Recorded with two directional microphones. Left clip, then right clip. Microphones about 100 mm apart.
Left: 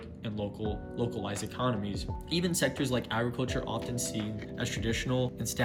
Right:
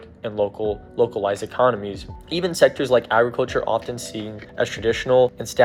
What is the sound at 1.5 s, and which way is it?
Speech, 30° left (ahead or behind).